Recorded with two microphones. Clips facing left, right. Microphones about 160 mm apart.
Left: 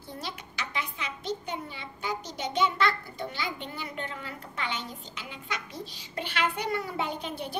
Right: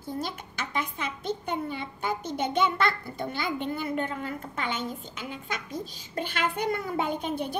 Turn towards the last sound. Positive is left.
turn(degrees=-50)  # may be behind; listen again after turning